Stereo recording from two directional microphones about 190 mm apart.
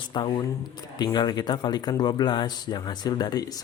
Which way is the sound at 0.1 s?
25° left (ahead or behind).